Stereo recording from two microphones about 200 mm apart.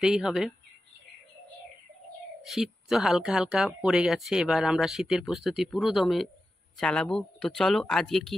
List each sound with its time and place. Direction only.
0.0 s speech: centre (ahead or behind)
2.4 s speech: centre (ahead or behind)